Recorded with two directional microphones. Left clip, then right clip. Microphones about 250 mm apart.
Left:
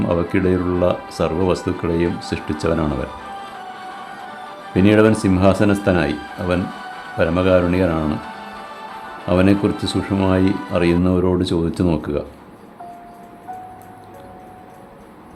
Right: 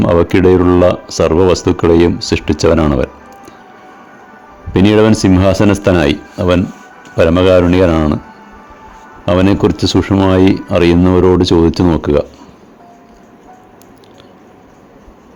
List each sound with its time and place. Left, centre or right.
0.0 s speech: right
4.7 s speech: right
8.2 s music: left
9.2 s speech: right